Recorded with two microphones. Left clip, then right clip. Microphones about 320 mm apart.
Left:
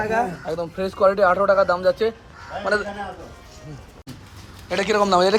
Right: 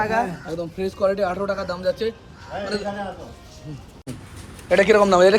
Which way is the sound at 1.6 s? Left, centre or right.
Left.